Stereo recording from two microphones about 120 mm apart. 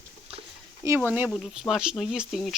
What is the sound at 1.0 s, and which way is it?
Speech, 15° right (ahead or behind).